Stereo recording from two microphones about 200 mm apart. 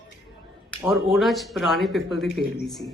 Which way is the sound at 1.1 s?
Centre (ahead or behind).